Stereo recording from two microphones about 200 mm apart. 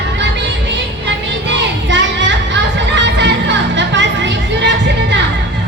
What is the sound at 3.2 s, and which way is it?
Music, 65° right (ahead or behind).